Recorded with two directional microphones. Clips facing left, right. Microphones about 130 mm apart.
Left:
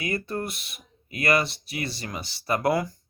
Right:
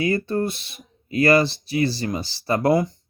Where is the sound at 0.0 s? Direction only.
30° right (ahead or behind).